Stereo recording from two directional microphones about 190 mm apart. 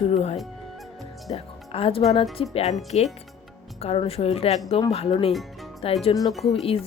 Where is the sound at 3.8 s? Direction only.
30° left (ahead or behind).